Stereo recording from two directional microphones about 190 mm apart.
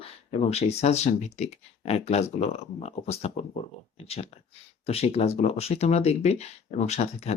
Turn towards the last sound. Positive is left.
turn(degrees=35)  # may be behind; listen again after turning